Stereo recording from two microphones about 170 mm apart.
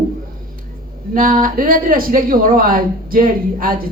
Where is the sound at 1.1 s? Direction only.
55° right (ahead or behind).